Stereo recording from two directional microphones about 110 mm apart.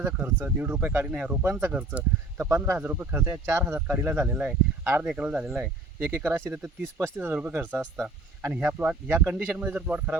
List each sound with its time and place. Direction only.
0.0 s speech: 20° right (ahead or behind)